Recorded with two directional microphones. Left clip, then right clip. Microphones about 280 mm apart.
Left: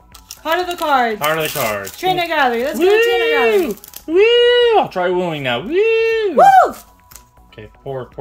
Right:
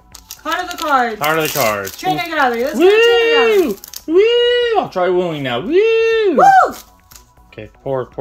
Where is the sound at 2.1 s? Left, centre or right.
Left.